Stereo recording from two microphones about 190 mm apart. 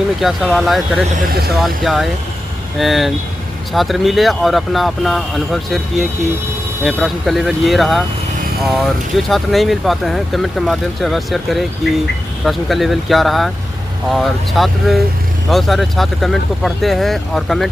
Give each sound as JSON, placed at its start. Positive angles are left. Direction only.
{"t": 0.2, "sound": "speech", "side_deg": 0}
{"t": 1.3, "sound": "speech", "side_deg": -55}
{"t": 1.6, "sound": "speech", "side_deg": 0}